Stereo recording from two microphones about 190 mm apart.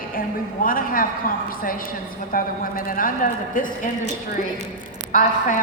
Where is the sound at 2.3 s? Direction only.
45° left (ahead or behind).